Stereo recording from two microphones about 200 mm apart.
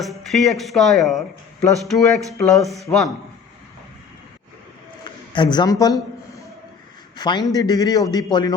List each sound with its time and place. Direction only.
0.0 s speech: centre (ahead or behind)
5.0 s a sound: 20° left (ahead or behind)
7.2 s speech: 20° left (ahead or behind)